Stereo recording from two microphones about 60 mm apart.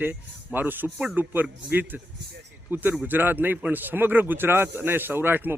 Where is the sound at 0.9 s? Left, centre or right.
Right.